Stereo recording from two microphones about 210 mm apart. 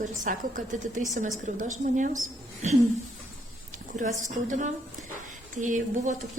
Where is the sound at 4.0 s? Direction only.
35° right (ahead or behind).